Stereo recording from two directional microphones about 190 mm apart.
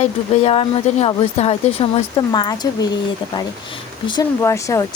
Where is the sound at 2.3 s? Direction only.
20° left (ahead or behind).